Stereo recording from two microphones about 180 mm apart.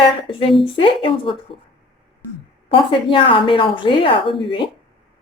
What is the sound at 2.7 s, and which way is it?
A woman's voice, 30° left (ahead or behind).